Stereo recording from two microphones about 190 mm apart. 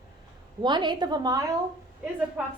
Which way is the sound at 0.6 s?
25° right (ahead or behind).